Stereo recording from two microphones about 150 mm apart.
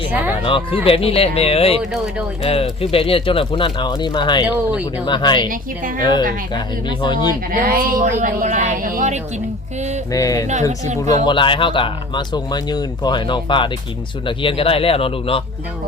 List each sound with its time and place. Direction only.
0.1 s speech: 10° right (ahead or behind)
0.4 s speech: 35° left (ahead or behind)
1.8 s speech: centre (ahead or behind)
2.4 s speech: 40° left (ahead or behind)
4.4 s speech: 10° right (ahead or behind)
5.0 s speech: 30° left (ahead or behind)
6.0 s music: 30° left (ahead or behind)
6.5 s speech: 30° left (ahead or behind)
7.5 s a woman's voice: 70° right (ahead or behind); by 9.2 s 55° right (ahead or behind)
10.1 s music: 20° left (ahead or behind)
10.8 s speech: 50° right (ahead or behind)
11.3 s speech: 35° left (ahead or behind)